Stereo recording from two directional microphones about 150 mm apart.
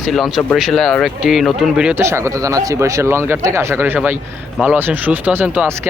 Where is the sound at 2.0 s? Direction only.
20° right (ahead or behind).